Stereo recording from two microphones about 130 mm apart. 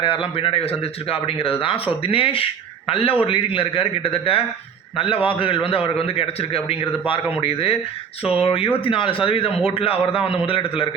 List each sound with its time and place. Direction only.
0.0 s speech: 45° left (ahead or behind)